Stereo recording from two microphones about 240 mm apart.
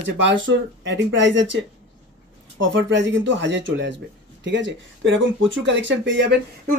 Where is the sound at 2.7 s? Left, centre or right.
Right.